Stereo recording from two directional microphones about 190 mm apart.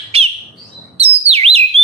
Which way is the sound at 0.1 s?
30° right (ahead or behind).